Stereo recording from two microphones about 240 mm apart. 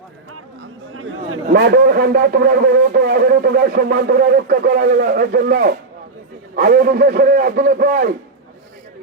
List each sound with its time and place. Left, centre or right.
0.3 s chatter: right
1.5 s a man's voice: right